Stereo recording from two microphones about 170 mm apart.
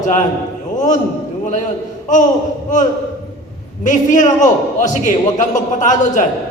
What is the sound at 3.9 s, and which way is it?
A man's voice, 45° left (ahead or behind).